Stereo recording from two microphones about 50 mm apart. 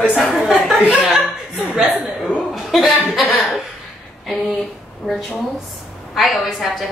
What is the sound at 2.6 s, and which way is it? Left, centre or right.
Speech, centre.